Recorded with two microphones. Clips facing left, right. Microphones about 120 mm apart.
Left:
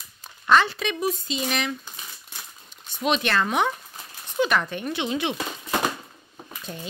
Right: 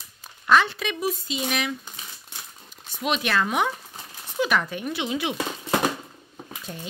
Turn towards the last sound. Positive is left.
turn(degrees=0)  # may be behind; listen again after turning